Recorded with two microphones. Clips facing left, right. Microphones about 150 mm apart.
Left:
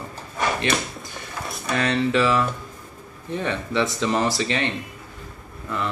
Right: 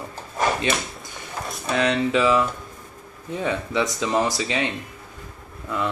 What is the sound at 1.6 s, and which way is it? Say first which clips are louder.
Speech: right 1 dB; 20° right (ahead or behind).